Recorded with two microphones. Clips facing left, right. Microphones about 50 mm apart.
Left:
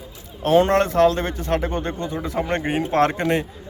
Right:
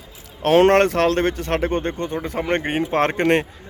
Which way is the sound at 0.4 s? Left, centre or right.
Right.